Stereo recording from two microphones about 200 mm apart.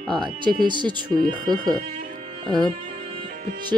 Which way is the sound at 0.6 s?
20° right (ahead or behind).